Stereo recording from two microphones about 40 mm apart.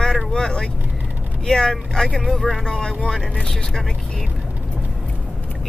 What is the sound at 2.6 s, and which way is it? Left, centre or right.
Speech, centre.